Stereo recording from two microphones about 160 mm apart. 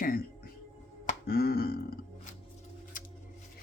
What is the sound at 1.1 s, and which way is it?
Burping, 70° left (ahead or behind).